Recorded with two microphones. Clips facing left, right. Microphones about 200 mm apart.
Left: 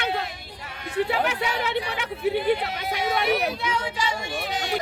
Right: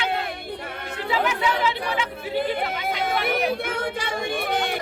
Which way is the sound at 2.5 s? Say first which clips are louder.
Left 1 dB; 55° right (ahead or behind).